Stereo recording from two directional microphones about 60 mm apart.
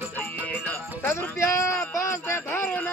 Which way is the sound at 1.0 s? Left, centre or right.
Left.